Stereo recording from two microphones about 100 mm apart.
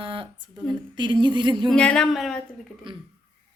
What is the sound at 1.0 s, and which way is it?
Speech, 50° right (ahead or behind).